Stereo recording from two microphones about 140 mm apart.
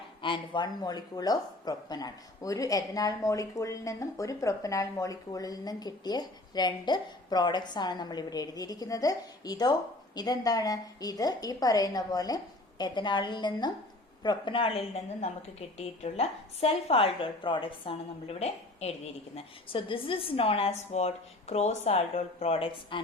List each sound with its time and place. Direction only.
0.2 s a woman's voice: 35° left (ahead or behind)
19.4 s a woman's voice: 40° left (ahead or behind)